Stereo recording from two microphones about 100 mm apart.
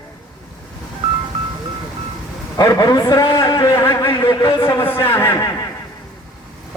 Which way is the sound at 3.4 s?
45° left (ahead or behind).